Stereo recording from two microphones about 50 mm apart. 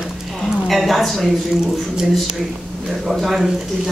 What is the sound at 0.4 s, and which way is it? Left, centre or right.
Speech, centre.